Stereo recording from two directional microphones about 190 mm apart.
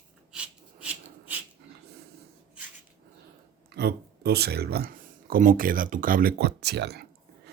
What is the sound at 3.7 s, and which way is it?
Speech, 60° right (ahead or behind).